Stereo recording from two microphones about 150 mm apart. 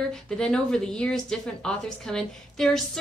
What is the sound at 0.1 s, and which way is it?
Speech, 5° left (ahead or behind).